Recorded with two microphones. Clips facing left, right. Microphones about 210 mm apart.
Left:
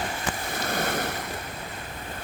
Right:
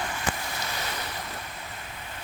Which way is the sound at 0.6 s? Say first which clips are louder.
Left 11 dB; 50° left (ahead or behind).